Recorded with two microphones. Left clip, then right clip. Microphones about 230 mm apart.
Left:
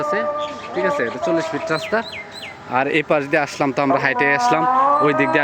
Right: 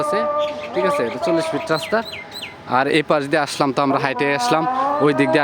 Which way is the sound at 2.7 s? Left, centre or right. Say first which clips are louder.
Right 1 dB; right.